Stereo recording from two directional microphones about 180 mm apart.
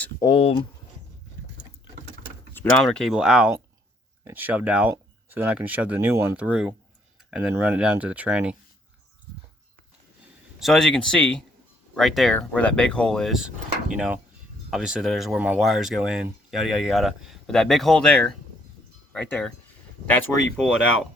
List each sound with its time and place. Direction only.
0.2 s speech: 30° left (ahead or behind)
2.5 s speech: 10° left (ahead or behind); by 8.5 s 5° right (ahead or behind)
10.6 s speech: centre (ahead or behind)